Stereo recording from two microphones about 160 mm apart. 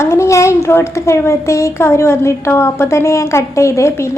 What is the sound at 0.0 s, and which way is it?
A child's voice, 15° left (ahead or behind).